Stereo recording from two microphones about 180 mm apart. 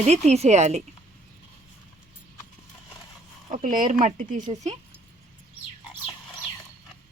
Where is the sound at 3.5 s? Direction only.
50° right (ahead or behind).